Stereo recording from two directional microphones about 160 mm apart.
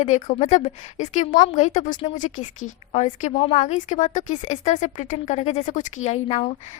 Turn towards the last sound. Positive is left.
turn(degrees=45)  # may be behind; listen again after turning